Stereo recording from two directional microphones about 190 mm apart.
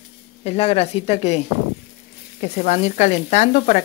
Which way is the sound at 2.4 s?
35° left (ahead or behind).